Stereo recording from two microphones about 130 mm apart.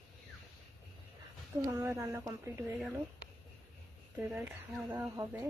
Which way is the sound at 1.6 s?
20° right (ahead or behind).